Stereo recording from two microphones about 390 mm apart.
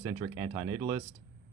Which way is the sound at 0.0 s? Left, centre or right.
Centre.